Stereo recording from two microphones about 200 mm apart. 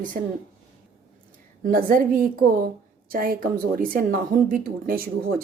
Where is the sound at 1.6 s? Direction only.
40° right (ahead or behind).